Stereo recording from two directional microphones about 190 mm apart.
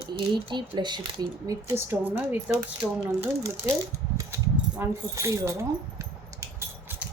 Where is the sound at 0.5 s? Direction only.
25° right (ahead or behind).